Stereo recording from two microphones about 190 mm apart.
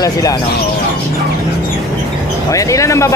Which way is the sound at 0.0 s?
20° left (ahead or behind).